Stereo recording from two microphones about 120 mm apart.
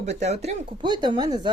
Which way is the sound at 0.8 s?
40° right (ahead or behind).